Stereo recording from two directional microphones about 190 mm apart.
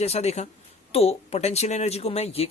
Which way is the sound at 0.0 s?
35° left (ahead or behind).